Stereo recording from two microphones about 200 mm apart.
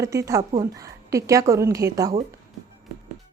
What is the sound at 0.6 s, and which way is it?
A woman's voice, 15° right (ahead or behind).